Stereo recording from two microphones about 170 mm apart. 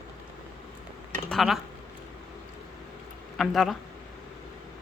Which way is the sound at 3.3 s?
Centre (ahead or behind).